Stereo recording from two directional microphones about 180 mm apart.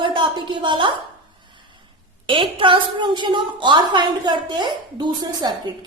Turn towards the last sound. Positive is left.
turn(degrees=-25)  # may be behind; listen again after turning